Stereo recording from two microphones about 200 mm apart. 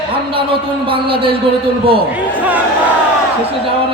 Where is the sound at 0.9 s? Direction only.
25° right (ahead or behind).